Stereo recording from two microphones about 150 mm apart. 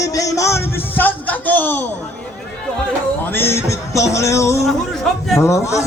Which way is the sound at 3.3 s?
15° left (ahead or behind).